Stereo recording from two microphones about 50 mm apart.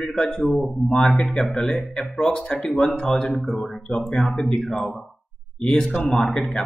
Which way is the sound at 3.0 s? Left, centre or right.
Centre.